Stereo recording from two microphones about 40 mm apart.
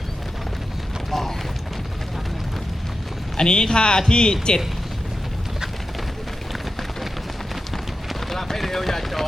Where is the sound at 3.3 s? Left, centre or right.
Centre.